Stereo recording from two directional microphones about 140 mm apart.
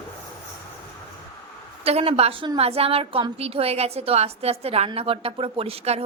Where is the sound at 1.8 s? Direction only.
45° right (ahead or behind).